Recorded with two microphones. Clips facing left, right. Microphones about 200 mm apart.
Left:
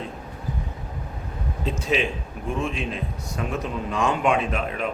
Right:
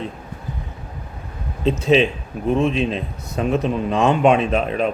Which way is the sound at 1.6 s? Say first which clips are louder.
Right 9 dB; 25° right (ahead or behind).